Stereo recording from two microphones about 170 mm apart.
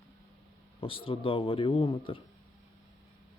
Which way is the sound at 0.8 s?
30° left (ahead or behind).